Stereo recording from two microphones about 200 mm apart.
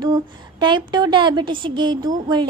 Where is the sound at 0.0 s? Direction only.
20° right (ahead or behind).